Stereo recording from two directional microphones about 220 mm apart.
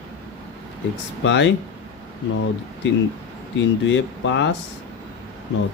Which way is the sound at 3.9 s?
55° left (ahead or behind).